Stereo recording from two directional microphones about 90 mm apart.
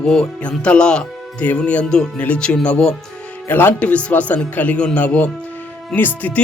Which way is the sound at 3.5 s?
20° left (ahead or behind).